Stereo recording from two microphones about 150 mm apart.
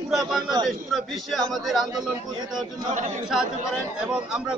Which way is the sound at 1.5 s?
Centre (ahead or behind).